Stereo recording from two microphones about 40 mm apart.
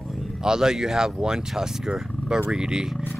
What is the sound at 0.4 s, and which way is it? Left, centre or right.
Speech, centre.